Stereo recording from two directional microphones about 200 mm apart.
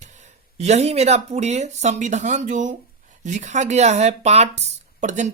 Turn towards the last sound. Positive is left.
turn(degrees=-40)  # may be behind; listen again after turning